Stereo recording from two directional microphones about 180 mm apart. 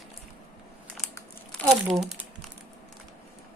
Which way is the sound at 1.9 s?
Centre (ahead or behind).